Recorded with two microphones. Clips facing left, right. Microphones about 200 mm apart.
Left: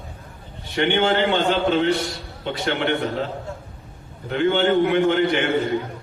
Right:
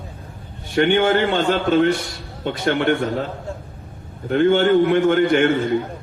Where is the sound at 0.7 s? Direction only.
50° right (ahead or behind).